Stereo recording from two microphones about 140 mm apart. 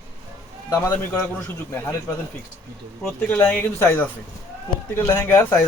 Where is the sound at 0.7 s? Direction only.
15° left (ahead or behind).